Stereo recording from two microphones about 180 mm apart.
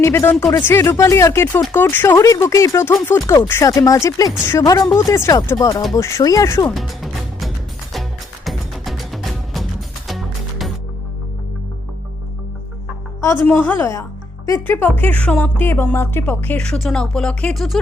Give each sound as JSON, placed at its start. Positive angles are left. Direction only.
{"t": 0.0, "sound": "speech", "side_deg": 15}
{"t": 6.7, "sound": "music", "side_deg": 0}
{"t": 13.2, "sound": "speech", "side_deg": 10}